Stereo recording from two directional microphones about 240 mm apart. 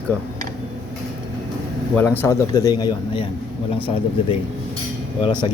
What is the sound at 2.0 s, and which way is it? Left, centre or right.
A man's voice, centre.